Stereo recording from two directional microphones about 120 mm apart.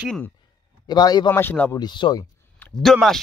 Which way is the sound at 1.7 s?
40° left (ahead or behind).